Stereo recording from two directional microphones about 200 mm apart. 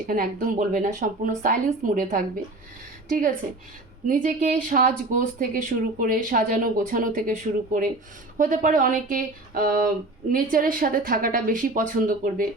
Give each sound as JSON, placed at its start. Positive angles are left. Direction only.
{"t": 0.1, "sound": "speech", "side_deg": -45}